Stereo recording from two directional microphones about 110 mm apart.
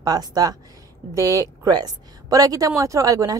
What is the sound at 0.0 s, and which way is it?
A woman's voice, 35° right (ahead or behind).